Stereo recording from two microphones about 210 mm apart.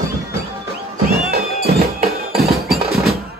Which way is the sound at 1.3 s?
45° right (ahead or behind).